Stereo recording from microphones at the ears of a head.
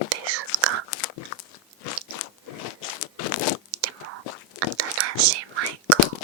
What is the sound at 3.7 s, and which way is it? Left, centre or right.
Biting, right.